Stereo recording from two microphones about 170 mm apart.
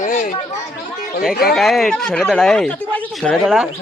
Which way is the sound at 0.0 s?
50° left (ahead or behind).